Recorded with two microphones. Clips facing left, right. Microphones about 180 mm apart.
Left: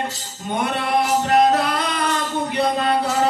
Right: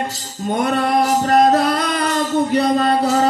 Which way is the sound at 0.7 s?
40° right (ahead or behind).